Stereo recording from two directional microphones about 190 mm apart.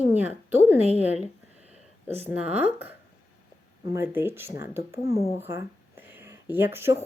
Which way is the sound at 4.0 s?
10° right (ahead or behind).